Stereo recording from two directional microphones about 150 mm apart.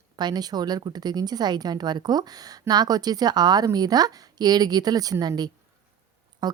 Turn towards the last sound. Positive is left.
turn(degrees=-30)  # may be behind; listen again after turning